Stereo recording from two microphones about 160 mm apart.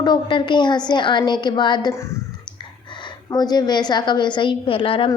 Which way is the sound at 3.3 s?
25° left (ahead or behind).